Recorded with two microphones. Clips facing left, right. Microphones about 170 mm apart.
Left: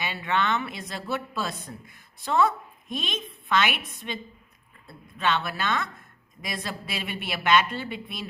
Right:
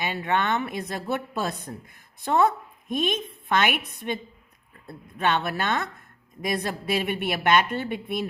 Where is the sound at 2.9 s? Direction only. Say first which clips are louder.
Right 7 dB; 55° right (ahead or behind).